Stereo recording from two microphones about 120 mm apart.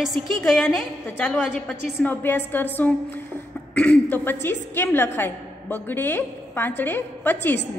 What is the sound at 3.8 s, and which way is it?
A woman's voice, 15° left (ahead or behind).